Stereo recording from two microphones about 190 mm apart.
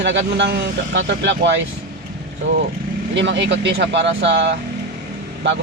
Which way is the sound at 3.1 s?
70° right (ahead or behind).